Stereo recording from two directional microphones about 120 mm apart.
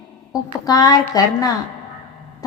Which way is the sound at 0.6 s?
30° left (ahead or behind).